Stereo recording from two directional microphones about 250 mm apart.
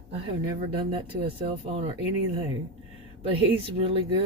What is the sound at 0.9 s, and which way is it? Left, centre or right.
Speech, right.